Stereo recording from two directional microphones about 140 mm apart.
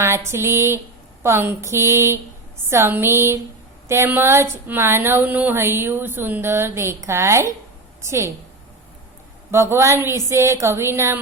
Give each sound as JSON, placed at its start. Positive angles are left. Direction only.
{"t": 0.3, "sound": "a woman's voice", "side_deg": -15}
{"t": 9.5, "sound": "a woman's voice", "side_deg": -20}